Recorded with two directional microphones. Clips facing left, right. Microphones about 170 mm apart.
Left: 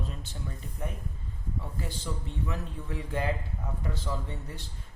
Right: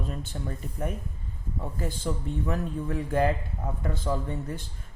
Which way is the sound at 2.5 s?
50° right (ahead or behind).